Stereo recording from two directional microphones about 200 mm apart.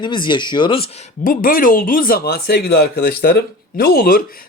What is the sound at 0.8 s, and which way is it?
Speech, 45° left (ahead or behind).